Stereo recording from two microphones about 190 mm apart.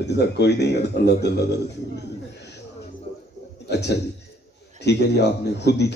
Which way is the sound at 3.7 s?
60° left (ahead or behind).